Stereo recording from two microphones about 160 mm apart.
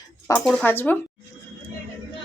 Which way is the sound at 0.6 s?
10° left (ahead or behind).